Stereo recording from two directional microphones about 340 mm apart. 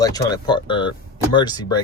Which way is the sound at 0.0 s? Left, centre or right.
Centre.